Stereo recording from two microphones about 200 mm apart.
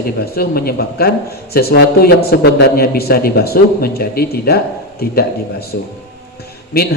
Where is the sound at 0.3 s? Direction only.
50° left (ahead or behind).